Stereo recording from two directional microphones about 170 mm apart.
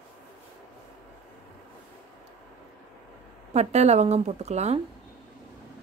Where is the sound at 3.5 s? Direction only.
40° right (ahead or behind).